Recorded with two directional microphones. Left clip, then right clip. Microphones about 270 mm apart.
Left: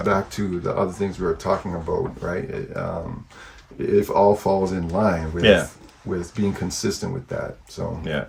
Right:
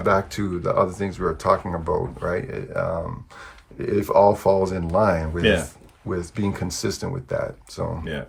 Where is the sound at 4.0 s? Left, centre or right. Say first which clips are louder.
Even; centre.